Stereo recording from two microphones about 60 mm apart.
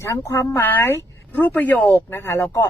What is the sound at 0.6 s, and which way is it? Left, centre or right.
Speech, left.